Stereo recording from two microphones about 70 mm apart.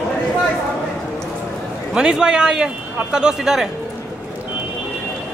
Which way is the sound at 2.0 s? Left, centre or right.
Centre.